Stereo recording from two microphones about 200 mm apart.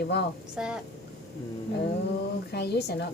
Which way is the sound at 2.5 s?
55° left (ahead or behind).